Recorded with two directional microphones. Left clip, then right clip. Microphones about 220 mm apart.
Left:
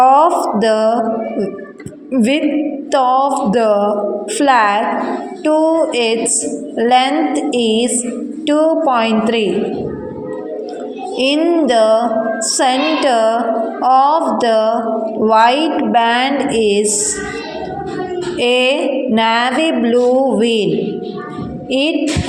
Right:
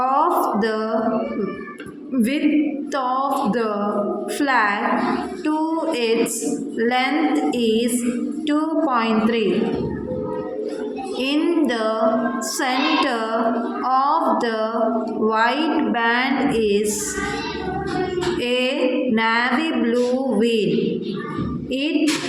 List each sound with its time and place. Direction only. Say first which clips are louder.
0.0 s a sound: left 8 dB; 25° left (ahead or behind)
2.1 s a woman's voice: left 5 dB; 25° left (ahead or behind)
11.2 s a woman's voice: left 7 dB; 25° left (ahead or behind)
18.3 s a woman's voice: left 10 dB; 25° left (ahead or behind)
21.7 s a woman's voice: left 9 dB; 25° left (ahead or behind)